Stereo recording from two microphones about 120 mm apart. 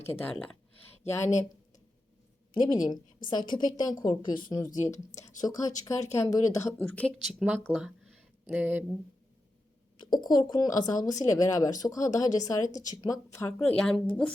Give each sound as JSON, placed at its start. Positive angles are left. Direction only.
{"t": 1.0, "sound": "speech", "side_deg": 20}
{"t": 2.5, "sound": "speech", "side_deg": 35}
{"t": 6.8, "sound": "speech", "side_deg": 10}
{"t": 7.3, "sound": "speech", "side_deg": -10}
{"t": 10.0, "sound": "speech", "side_deg": 35}
{"t": 13.5, "sound": "speech", "side_deg": 10}